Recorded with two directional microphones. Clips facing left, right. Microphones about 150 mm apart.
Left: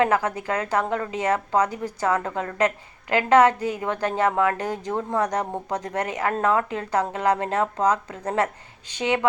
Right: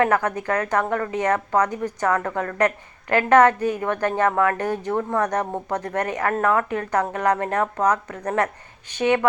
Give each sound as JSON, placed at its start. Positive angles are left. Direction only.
{"t": 0.0, "sound": "a woman's voice", "side_deg": 15}
{"t": 9.0, "sound": "a woman's voice", "side_deg": 15}